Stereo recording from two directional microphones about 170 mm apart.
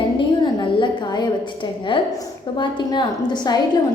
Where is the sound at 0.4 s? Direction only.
25° left (ahead or behind).